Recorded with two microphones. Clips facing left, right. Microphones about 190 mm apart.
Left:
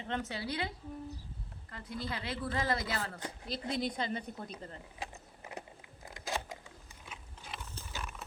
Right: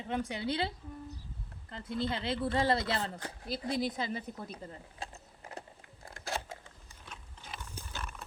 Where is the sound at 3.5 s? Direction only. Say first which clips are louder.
Right 2 dB; 5° right (ahead or behind).